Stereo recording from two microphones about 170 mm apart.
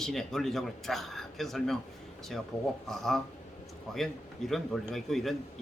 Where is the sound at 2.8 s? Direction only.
Centre (ahead or behind).